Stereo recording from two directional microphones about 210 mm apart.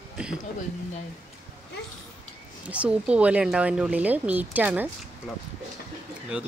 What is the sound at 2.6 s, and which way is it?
Speech, 5° right (ahead or behind).